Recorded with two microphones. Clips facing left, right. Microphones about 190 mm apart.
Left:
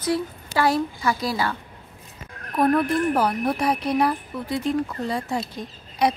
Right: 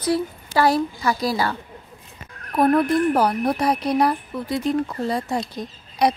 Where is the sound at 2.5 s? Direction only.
35° right (ahead or behind).